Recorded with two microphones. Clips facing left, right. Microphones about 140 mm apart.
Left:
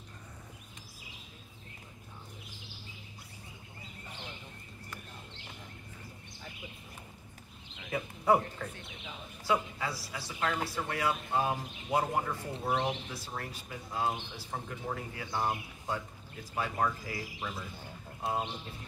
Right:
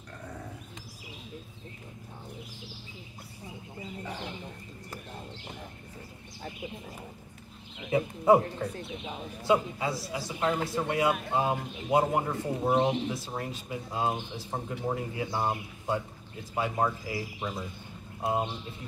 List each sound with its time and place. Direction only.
7.9 s speech: 25° right (ahead or behind)
8.4 s speech: 35° right (ahead or behind)
9.5 s speech: 25° right (ahead or behind)